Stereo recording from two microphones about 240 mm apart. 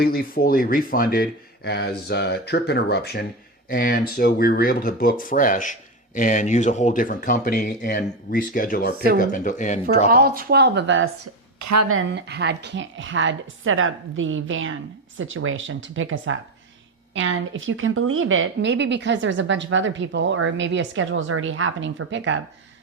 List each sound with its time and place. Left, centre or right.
0.0 s speech: left
10.1 s a woman's voice: right
11.7 s a woman's voice: right
12.1 s a woman's voice: right